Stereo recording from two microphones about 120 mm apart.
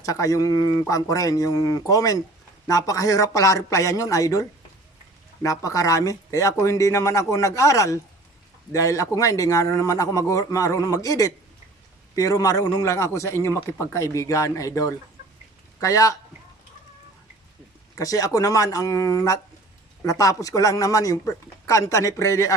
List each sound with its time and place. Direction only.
0.0 s speech: 30° left (ahead or behind)
17.9 s speech: 30° left (ahead or behind)